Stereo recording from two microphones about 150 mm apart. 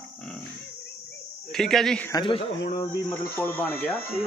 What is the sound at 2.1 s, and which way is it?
Speech, 35° left (ahead or behind).